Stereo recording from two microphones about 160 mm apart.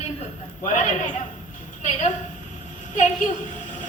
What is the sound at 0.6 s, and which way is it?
A man's voice, 50° left (ahead or behind).